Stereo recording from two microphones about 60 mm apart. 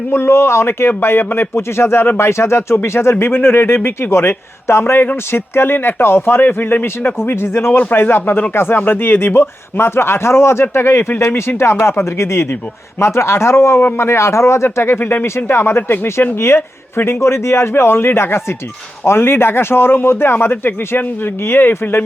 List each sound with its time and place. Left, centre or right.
0.1 s a man's voice: left